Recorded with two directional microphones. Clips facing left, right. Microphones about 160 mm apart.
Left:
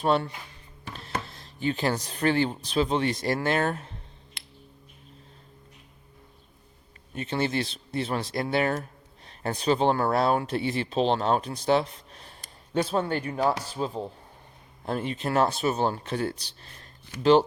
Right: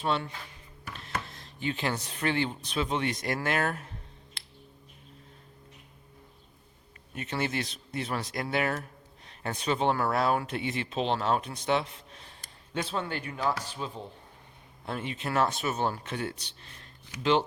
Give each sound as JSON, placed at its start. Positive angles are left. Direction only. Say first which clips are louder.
{"t": 0.0, "sound": "speech", "louder": "left 6 dB", "side_deg": 40}
{"t": 0.9, "sound": "speech", "louder": "left 3 dB", "side_deg": 30}
{"t": 7.1, "sound": "speech", "louder": "left 4 dB", "side_deg": 30}